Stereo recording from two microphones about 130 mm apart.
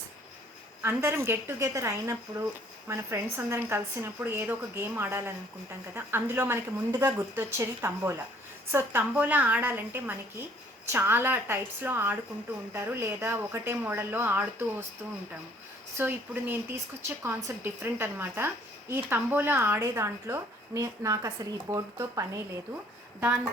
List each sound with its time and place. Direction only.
0.8 s a woman's voice: 15° right (ahead or behind)
16.0 s a woman's voice: 15° right (ahead or behind)